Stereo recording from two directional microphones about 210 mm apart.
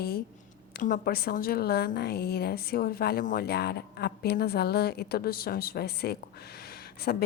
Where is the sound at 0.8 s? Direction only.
45° left (ahead or behind).